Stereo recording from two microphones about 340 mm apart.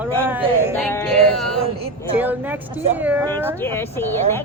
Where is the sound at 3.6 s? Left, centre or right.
Centre.